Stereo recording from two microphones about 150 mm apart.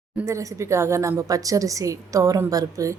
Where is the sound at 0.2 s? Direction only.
20° right (ahead or behind).